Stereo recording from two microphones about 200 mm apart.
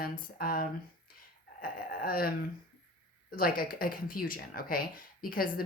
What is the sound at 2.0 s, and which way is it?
Speech, 45° left (ahead or behind).